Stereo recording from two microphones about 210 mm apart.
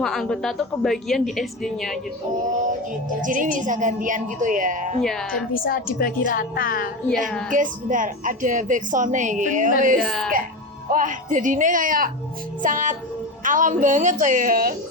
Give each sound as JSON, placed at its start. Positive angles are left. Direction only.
{"t": 0.0, "sound": "a woman's voice", "side_deg": 0}
{"t": 3.2, "sound": "a woman's voice", "side_deg": -40}
{"t": 5.3, "sound": "a woman's voice", "side_deg": 40}
{"t": 7.5, "sound": "a woman's voice", "side_deg": -40}
{"t": 10.0, "sound": "a woman's voice", "side_deg": 0}
{"t": 10.8, "sound": "a woman's voice", "side_deg": -40}